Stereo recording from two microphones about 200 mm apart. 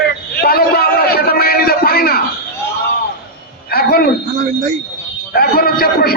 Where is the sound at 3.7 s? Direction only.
50° left (ahead or behind).